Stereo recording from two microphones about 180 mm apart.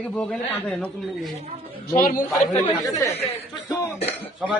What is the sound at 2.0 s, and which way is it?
Speech, 50° left (ahead or behind).